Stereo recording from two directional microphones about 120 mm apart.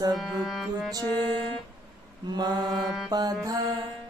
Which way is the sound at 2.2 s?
35° right (ahead or behind).